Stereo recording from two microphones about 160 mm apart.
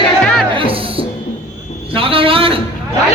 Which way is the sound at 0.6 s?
35° right (ahead or behind).